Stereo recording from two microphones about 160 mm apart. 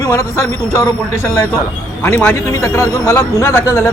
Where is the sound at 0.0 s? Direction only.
20° left (ahead or behind).